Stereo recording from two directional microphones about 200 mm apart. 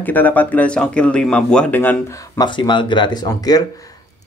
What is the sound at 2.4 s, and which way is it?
Speech, 25° left (ahead or behind).